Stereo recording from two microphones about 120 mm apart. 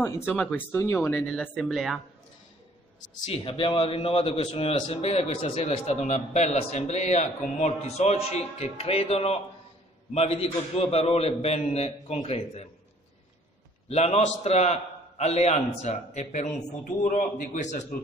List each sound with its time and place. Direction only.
0.0 s speech: 15° left (ahead or behind)
1.1 s speech: 10° left (ahead or behind)
3.4 s a man's voice: 45° left (ahead or behind)
13.8 s a man's voice: 60° left (ahead or behind)
17.1 s a man's voice: 90° left